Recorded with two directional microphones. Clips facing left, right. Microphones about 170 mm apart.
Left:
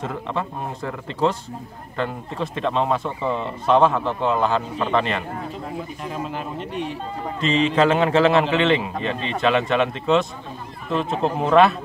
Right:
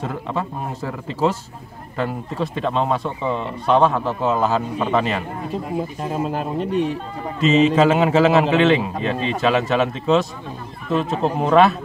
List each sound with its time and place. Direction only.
0.0 s speech: centre (ahead or behind)
6.0 s speech: 45° right (ahead or behind)
7.3 s speech: 5° right (ahead or behind)